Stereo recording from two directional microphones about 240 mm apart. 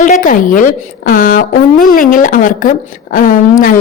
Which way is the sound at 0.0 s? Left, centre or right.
Left.